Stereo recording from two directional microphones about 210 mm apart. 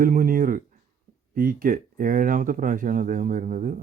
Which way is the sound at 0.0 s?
40° right (ahead or behind).